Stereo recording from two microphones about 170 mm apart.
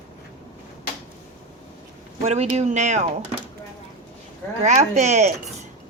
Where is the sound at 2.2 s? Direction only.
40° right (ahead or behind).